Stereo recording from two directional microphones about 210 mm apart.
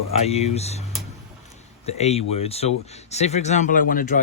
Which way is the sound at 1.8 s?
30° left (ahead or behind).